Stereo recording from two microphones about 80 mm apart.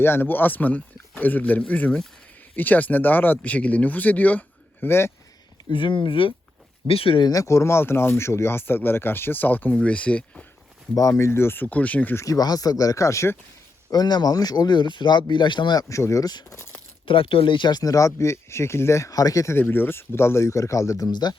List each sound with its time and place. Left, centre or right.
0.0 s speech: left
5.7 s speech: left
7.3 s speech: left; by 10.4 s centre
10.9 s speech: left; by 12.1 s centre
12.1 s speech: left
13.9 s speech: left
15.8 s speech: left
17.1 s speech: left
17.9 s speech: left
19.5 s speech: left
21.1 s speech: left